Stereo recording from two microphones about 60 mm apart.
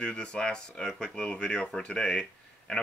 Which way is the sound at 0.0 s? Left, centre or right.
Centre.